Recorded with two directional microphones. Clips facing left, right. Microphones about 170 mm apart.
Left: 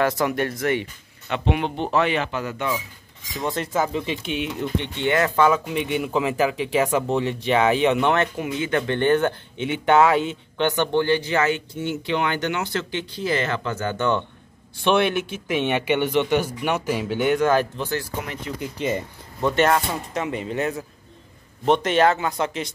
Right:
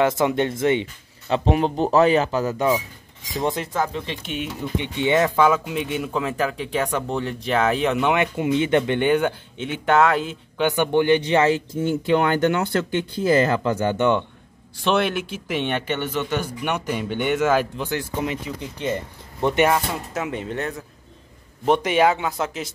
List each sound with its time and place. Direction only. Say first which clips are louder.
0.0 s speech: right 2 dB; 20° right (ahead or behind)
1.3 s a man's voice: right 4 dB; 35° right (ahead or behind)
3.5 s speech: left 1 dB; 5° left (ahead or behind)
4.8 s speech: right 4 dB; 15° right (ahead or behind)
5.9 s speech: left 4 dB; 5° left (ahead or behind)
8.4 s speech: right 5 dB; 25° right (ahead or behind)
9.7 s speech: left 1 dB; centre (ahead or behind)
10.7 s speech: right 3 dB; 15° right (ahead or behind)
11.8 s speech: right 5 dB; 40° right (ahead or behind)
13.9 s speech: right 1 dB; 15° right (ahead or behind)
14.8 s speech: left 1 dB; centre (ahead or behind); by 18.4 s 15° right (ahead or behind)
19.4 s speech: right 1 dB; 15° right (ahead or behind)
19.7 s speech: left 1 dB; centre (ahead or behind)
21.6 s speech: even; 10° right (ahead or behind)